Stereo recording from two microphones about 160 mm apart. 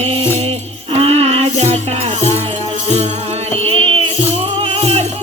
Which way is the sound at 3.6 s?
35° right (ahead or behind).